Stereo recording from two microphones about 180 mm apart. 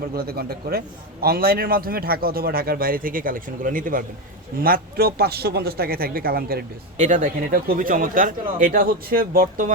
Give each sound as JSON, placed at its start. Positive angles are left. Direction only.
{"t": 0.1, "sound": "a man's voice", "side_deg": -60}
{"t": 6.9, "sound": "speech", "side_deg": -45}